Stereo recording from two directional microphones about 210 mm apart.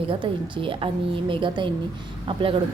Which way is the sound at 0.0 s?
25° right (ahead or behind).